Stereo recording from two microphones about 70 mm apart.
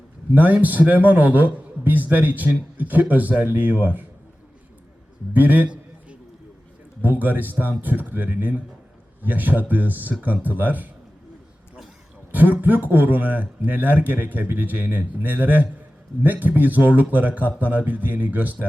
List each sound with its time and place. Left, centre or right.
0.3 s a man's voice: right
5.3 s a sound: right
7.0 s a man's voice: right
12.3 s a man's voice: right